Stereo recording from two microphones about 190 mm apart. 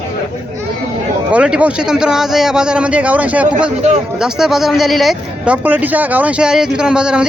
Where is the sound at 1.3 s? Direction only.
5° right (ahead or behind).